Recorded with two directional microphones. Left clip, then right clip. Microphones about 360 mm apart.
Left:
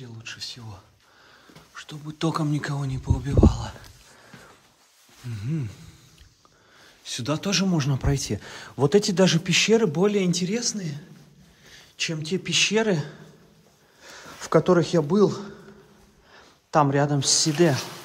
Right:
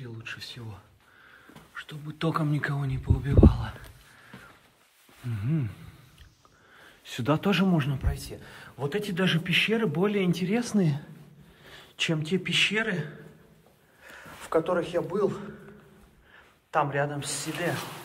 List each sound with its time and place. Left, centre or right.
0.0 s a sound: centre
1.3 s speech: centre
5.3 s speech: centre
6.8 s a man's voice: centre